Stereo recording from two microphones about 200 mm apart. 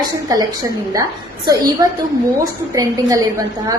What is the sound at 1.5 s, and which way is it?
A woman's voice, 20° right (ahead or behind).